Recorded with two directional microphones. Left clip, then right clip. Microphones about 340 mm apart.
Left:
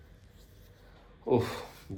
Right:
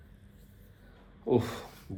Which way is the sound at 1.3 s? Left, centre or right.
Centre.